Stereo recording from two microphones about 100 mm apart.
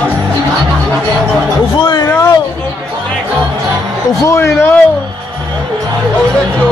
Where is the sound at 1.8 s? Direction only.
50° left (ahead or behind).